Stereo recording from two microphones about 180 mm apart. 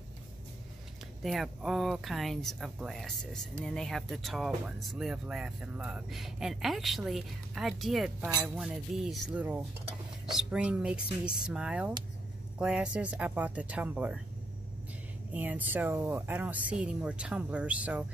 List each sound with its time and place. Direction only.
1.2 s speech: centre (ahead or behind)
15.3 s speech: 10° right (ahead or behind)